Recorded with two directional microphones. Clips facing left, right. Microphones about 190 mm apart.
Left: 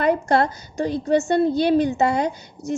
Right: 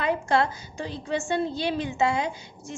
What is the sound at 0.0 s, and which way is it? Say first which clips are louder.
A woman's voice: left 5 dB; 45° left (ahead or behind).